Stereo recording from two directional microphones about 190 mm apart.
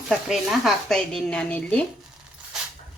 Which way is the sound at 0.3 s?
Centre (ahead or behind).